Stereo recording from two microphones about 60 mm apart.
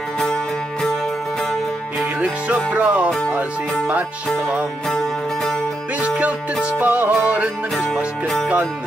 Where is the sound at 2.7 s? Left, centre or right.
Right.